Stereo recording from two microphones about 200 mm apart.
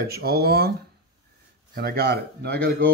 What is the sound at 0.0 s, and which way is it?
Speech, 50° right (ahead or behind).